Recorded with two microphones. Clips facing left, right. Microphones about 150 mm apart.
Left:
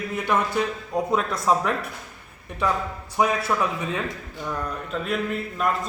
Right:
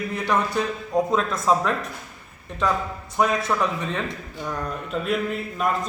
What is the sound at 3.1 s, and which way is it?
Speech, 10° left (ahead or behind).